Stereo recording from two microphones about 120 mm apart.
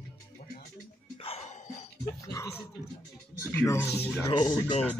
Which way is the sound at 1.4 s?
80° left.